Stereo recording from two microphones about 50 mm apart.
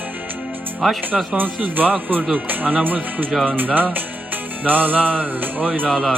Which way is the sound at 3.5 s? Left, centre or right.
Right.